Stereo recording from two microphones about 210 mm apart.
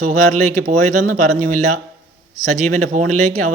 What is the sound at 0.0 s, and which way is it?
Speech, 35° right (ahead or behind).